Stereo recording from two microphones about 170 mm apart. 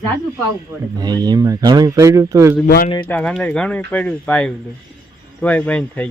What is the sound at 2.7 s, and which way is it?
Speech, 65° left (ahead or behind).